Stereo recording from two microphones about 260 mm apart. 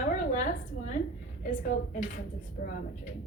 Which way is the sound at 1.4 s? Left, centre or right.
Left.